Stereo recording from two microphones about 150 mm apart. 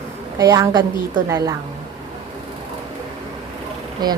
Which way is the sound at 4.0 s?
25° right (ahead or behind).